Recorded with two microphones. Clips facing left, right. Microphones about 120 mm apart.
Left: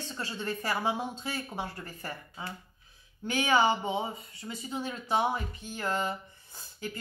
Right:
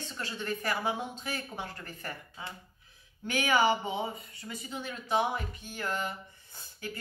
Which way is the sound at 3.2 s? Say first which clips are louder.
Left 1 dB; 20° left (ahead or behind).